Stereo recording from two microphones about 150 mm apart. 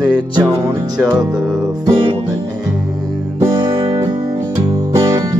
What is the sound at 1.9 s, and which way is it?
Music, 35° right (ahead or behind).